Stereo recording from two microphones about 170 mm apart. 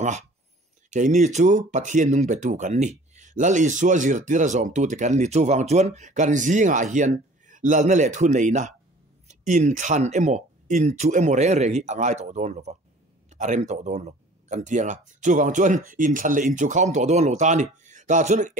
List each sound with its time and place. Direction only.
0.8 s speech: 45° right (ahead or behind)